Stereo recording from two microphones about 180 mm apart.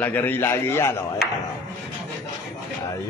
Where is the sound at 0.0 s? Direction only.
10° left (ahead or behind).